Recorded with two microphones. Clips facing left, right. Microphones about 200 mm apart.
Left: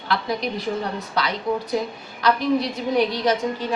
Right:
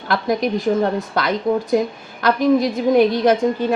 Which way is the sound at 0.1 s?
45° right (ahead or behind).